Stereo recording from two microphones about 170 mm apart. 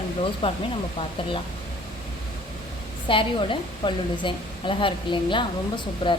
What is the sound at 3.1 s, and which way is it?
A woman's voice, 30° left (ahead or behind).